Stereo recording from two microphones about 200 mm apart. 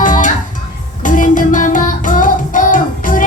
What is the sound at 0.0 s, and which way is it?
Music, 40° left (ahead or behind).